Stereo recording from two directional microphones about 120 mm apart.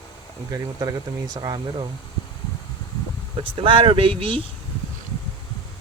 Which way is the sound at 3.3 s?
45° right (ahead or behind).